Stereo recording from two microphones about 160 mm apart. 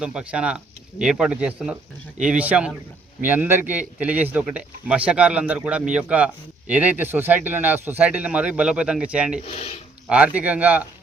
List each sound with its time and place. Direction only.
0.0 s a man's voice: 5° right (ahead or behind)
9.4 s speech: 40° left (ahead or behind)
10.1 s a man's voice: 10° right (ahead or behind)